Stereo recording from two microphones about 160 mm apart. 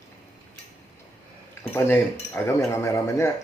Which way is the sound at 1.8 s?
10° left (ahead or behind).